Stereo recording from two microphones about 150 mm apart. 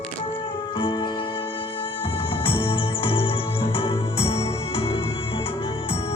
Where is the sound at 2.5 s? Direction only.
35° left (ahead or behind).